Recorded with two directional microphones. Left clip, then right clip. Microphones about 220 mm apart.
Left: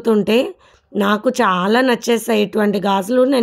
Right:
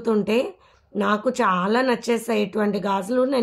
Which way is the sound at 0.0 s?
40° left (ahead or behind).